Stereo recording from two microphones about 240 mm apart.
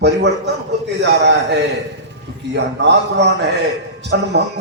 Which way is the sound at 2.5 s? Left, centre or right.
Right.